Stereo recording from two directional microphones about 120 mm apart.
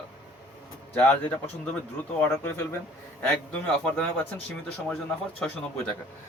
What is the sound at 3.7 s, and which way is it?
Speech, 10° left (ahead or behind).